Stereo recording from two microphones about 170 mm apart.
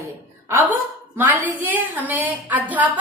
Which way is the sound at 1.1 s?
10° right (ahead or behind).